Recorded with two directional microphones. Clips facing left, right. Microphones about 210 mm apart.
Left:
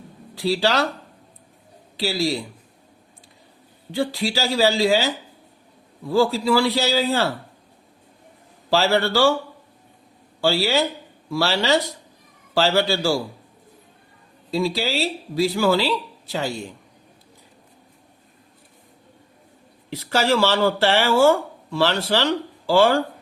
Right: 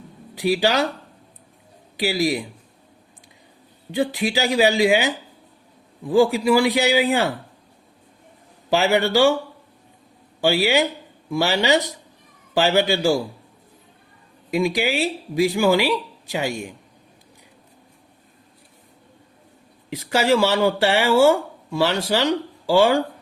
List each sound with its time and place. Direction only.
0.3 s speech: 15° right (ahead or behind)
2.0 s speech: 15° right (ahead or behind)
3.9 s speech: 20° right (ahead or behind)
8.7 s speech: 15° right (ahead or behind)
10.4 s speech: 15° right (ahead or behind)
14.5 s speech: 15° right (ahead or behind)
19.9 s speech: 15° right (ahead or behind)